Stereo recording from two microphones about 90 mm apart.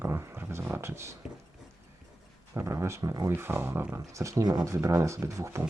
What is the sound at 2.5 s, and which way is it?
Speech, 35° right (ahead or behind).